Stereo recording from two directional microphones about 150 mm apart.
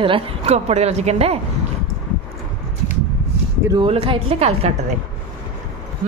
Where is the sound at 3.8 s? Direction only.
35° right (ahead or behind).